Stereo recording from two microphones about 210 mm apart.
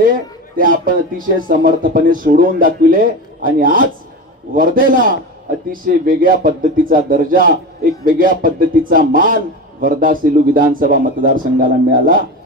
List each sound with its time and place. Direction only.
0.0 s speech: 40° right (ahead or behind)